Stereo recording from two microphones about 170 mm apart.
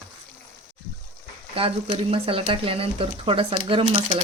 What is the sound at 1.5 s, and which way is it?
Speech, 35° right (ahead or behind).